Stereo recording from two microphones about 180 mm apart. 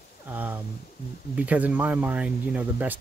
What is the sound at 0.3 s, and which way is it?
Speech, 10° right (ahead or behind).